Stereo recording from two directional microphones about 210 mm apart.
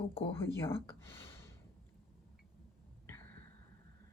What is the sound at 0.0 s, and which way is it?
Speech, 25° left (ahead or behind).